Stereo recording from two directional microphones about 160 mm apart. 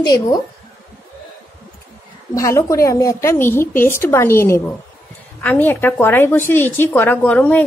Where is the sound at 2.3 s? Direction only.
20° left (ahead or behind).